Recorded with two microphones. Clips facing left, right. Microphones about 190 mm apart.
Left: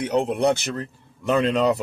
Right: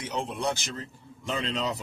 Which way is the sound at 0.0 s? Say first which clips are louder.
Left 10 dB; 65° left (ahead or behind).